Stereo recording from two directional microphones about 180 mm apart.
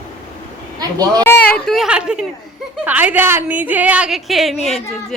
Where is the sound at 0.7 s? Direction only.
20° right (ahead or behind).